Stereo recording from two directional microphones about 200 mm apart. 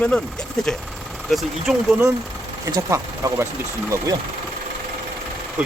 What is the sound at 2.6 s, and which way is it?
Speech, 15° right (ahead or behind).